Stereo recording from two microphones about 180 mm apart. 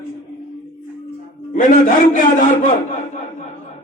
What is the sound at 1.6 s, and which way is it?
A man's voice, 45° left (ahead or behind).